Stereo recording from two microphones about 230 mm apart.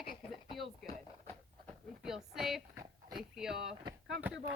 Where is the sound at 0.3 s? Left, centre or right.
Centre.